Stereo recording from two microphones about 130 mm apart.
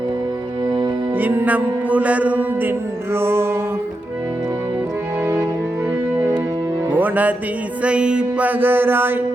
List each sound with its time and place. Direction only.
1.2 s mantra: 15° right (ahead or behind)
6.1 s music: 15° right (ahead or behind)
7.9 s mantra: 10° right (ahead or behind)